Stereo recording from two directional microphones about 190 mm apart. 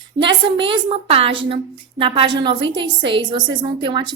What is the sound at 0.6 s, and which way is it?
A woman's voice, 30° right (ahead or behind).